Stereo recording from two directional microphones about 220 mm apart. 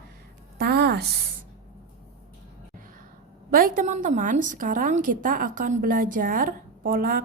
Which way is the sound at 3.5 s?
40° right (ahead or behind).